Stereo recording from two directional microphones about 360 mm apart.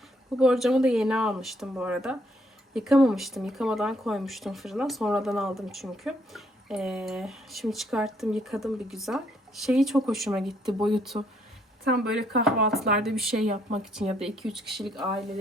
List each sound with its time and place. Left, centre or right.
0.3 s speech: centre
10.7 s speech: centre
11.9 s speech: right
12.5 s speech: centre